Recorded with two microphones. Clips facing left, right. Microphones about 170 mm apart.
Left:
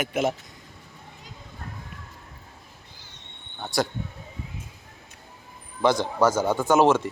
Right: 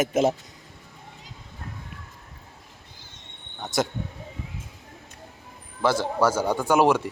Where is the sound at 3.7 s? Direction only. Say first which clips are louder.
Even; 20° right (ahead or behind).